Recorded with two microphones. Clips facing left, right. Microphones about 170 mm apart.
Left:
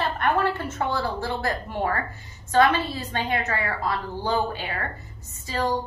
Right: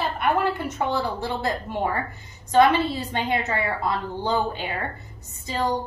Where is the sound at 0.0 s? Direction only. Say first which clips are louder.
Even; 10° right (ahead or behind).